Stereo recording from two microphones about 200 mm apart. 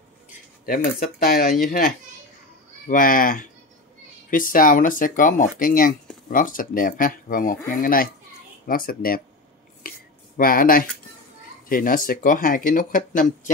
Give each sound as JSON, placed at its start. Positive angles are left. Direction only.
{"t": 0.3, "sound": "speech", "side_deg": 45}
{"t": 9.8, "sound": "a sound", "side_deg": 45}
{"t": 11.7, "sound": "speech", "side_deg": 45}